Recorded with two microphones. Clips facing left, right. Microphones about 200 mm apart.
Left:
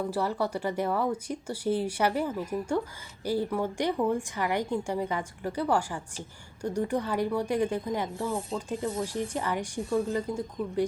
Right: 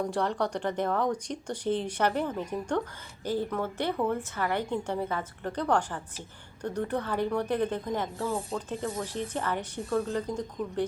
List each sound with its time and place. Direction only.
0.1 s speech: 5° left (ahead or behind)
8.3 s speech: centre (ahead or behind)
8.7 s speech: 15° left (ahead or behind)